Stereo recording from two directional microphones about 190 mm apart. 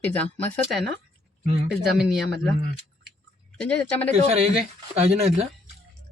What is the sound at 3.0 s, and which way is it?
Chewing, 5° left (ahead or behind).